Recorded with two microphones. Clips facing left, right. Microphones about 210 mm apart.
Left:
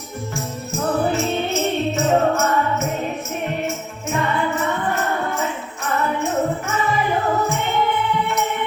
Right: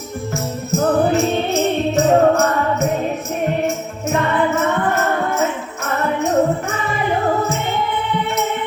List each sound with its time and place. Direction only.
0.8 s music: 35° right (ahead or behind)
4.1 s music: 45° right (ahead or behind)